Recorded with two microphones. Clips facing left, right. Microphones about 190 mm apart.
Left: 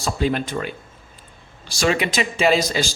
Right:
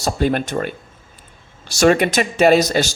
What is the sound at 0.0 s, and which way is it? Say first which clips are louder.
Speech: right 3 dB; 50° right (ahead or behind).